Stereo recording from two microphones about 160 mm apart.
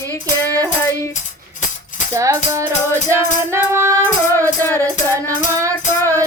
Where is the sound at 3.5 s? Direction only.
15° right (ahead or behind).